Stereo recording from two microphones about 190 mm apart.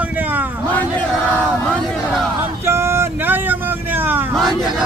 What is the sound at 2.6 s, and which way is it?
Vehicle, 15° right (ahead or behind).